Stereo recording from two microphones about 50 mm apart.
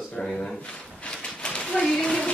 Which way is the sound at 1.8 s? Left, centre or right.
Centre.